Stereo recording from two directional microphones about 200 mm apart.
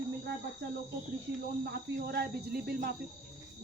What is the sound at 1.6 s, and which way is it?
A woman's voice, 55° right (ahead or behind).